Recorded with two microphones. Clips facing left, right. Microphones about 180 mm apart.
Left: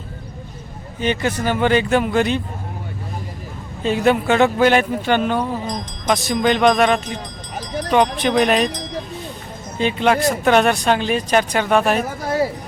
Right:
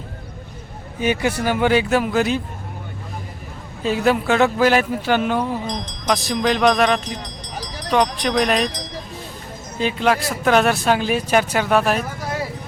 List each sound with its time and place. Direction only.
0.9 s speech: 10° right (ahead or behind)
3.8 s speech: centre (ahead or behind)
7.6 s a sound: 55° left (ahead or behind)
8.2 s speech: 5° left (ahead or behind)
9.7 s speech: centre (ahead or behind)